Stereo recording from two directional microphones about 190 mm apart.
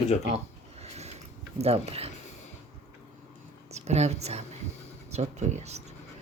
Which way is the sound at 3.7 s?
35° right (ahead or behind).